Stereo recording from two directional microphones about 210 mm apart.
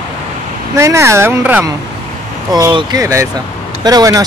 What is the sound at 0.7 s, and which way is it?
Speech, 15° right (ahead or behind).